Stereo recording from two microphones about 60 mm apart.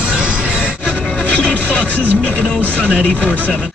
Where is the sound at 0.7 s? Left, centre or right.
Left.